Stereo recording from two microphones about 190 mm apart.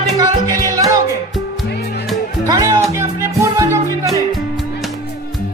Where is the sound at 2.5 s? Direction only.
15° right (ahead or behind).